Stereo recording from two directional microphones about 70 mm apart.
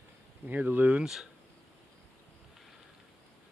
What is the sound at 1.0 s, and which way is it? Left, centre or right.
Speech, centre.